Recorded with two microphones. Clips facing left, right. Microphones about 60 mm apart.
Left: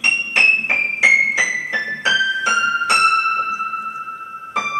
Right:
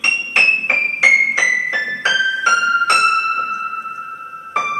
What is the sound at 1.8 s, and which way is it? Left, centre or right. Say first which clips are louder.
Keyboard: right 1 dB; right.